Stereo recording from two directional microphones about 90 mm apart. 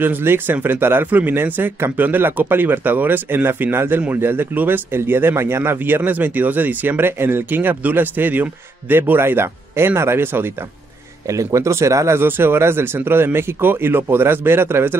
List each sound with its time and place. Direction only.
0.0 s speech: 25° right (ahead or behind)
11.2 s speech: 35° right (ahead or behind)